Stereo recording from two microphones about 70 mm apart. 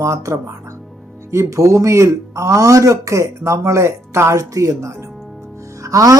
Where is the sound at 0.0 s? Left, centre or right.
Right.